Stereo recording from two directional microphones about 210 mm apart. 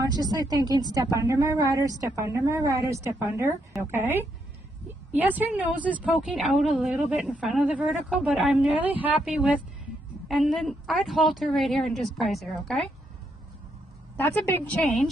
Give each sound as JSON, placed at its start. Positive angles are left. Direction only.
{"t": 0.0, "sound": "a woman's voice", "side_deg": -20}
{"t": 14.2, "sound": "a woman's voice", "side_deg": 10}